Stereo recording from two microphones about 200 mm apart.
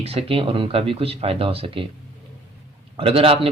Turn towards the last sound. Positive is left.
turn(degrees=-30)  # may be behind; listen again after turning